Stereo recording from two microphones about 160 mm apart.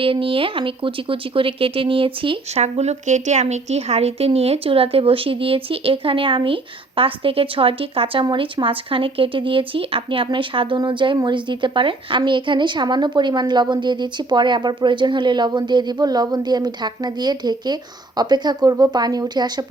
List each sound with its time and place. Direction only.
0.0 s speech: 35° right (ahead or behind)